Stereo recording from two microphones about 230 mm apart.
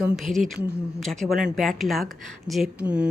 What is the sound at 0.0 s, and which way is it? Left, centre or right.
Speech, centre.